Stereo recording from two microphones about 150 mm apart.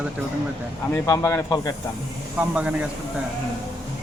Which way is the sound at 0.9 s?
15° left (ahead or behind).